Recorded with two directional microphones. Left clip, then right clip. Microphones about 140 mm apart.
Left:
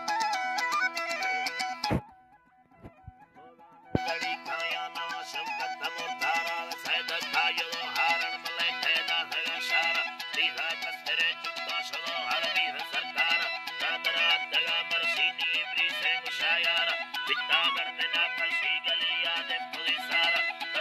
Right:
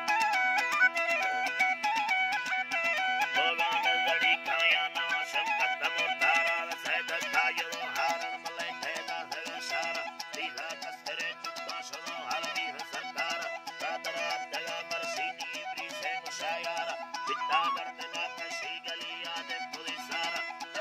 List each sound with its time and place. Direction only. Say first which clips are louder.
0.7 s music: right 3 dB; 25° right (ahead or behind)
4.1 s music: right 5 dB; centre (ahead or behind)
6.2 s music: right 1 dB; 10° right (ahead or behind)
16.6 s music: left 7 dB; centre (ahead or behind)
18.5 s music: left 9 dB; 10° right (ahead or behind)